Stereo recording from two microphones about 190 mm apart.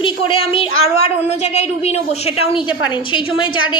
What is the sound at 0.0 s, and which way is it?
A woman's voice, 30° left (ahead or behind).